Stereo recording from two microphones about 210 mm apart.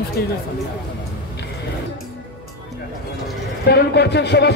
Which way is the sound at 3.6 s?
50° left (ahead or behind).